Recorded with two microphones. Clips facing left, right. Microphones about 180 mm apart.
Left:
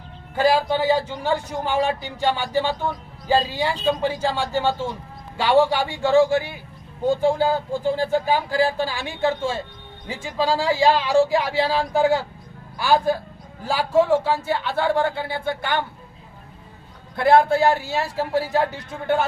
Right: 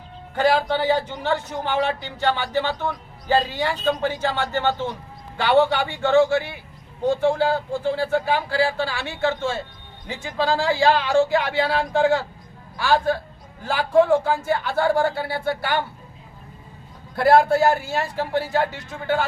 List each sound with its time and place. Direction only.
0.3 s a man's voice: 10° left (ahead or behind)
14.8 s speech: 5° right (ahead or behind)
17.2 s a man's voice: 5° right (ahead or behind)